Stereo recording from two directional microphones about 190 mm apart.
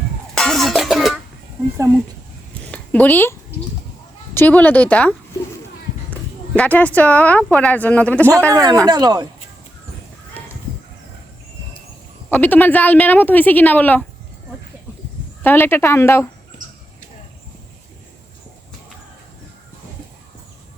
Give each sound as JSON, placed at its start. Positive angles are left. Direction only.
{"t": 0.3, "sound": "music", "side_deg": 0}
{"t": 2.7, "sound": "speech", "side_deg": 10}
{"t": 4.4, "sound": "speech", "side_deg": 10}
{"t": 8.4, "sound": "speech", "side_deg": -20}
{"t": 12.3, "sound": "speech", "side_deg": 10}
{"t": 15.4, "sound": "speech", "side_deg": 10}